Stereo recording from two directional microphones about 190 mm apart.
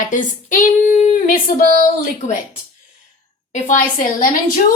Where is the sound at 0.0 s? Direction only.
45° left (ahead or behind).